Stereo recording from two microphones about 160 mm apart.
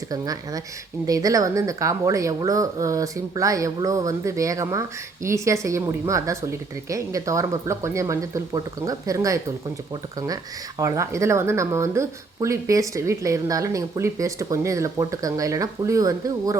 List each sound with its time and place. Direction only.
0.1 s speech: 20° right (ahead or behind)